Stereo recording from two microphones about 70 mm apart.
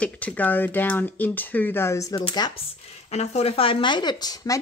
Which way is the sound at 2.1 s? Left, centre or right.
Left.